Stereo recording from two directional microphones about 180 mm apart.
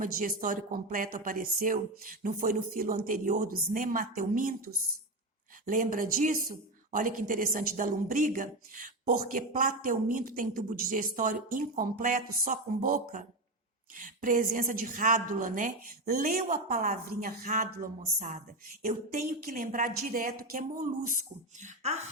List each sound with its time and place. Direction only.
0.0 s a woman's voice: 50° right (ahead or behind)